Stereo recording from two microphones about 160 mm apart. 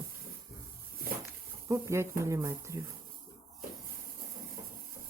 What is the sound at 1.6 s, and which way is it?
Speech, 15° right (ahead or behind).